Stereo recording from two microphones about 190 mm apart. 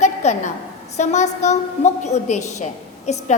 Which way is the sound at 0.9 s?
35° left (ahead or behind).